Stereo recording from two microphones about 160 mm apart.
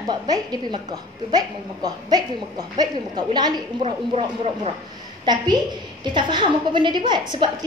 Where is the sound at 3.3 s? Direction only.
25° right (ahead or behind).